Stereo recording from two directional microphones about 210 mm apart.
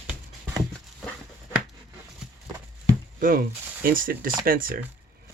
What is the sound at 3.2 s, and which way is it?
Speech, 45° right (ahead or behind).